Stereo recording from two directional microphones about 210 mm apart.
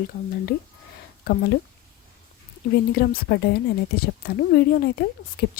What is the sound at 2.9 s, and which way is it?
Speech, 45° left (ahead or behind).